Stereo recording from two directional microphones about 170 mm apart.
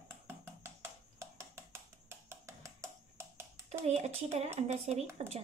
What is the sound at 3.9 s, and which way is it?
Speech, 40° right (ahead or behind).